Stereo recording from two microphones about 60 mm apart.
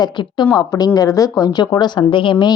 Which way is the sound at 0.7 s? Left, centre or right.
Left.